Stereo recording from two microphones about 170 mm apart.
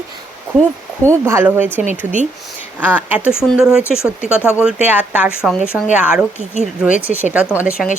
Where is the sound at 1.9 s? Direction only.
45° right (ahead or behind).